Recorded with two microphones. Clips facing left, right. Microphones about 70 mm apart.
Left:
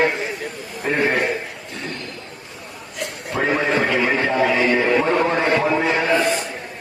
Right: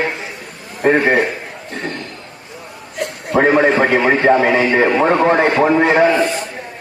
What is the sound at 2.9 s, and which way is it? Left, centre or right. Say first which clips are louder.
A man's voice: right 8 dB; right.